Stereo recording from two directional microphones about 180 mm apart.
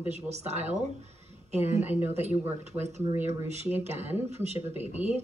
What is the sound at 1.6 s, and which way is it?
Speech, 35° left (ahead or behind).